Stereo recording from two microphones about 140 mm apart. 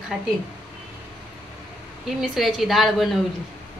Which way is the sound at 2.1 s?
Centre (ahead or behind).